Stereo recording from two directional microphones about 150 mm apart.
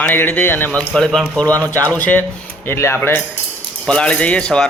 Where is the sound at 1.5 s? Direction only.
20° right (ahead or behind).